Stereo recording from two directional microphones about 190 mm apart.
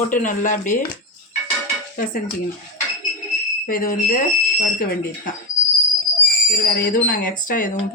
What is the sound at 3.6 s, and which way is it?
Speech, 50° left (ahead or behind).